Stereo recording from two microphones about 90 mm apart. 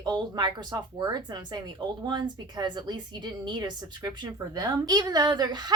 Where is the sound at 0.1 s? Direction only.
55° right (ahead or behind).